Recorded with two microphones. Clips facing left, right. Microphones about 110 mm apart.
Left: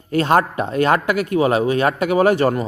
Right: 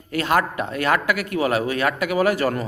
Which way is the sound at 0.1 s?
30° left (ahead or behind).